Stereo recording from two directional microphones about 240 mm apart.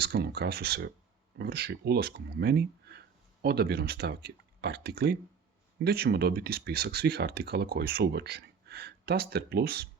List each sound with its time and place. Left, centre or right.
0.0 s speech: right